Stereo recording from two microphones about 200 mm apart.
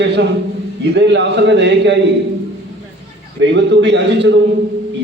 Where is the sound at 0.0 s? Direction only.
60° right (ahead or behind).